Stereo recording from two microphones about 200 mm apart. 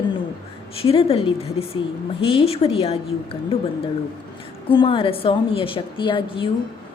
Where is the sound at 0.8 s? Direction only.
30° left (ahead or behind).